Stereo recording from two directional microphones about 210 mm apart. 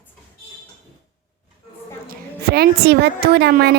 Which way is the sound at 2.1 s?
50° right (ahead or behind).